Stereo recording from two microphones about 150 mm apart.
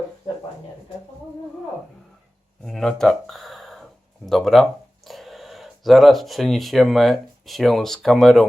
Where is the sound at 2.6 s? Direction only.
Centre (ahead or behind).